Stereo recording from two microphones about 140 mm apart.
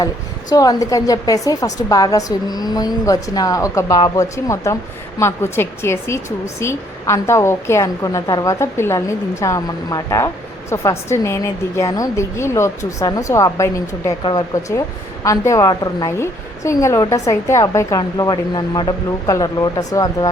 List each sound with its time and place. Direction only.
0.5 s a woman's voice: 25° left (ahead or behind)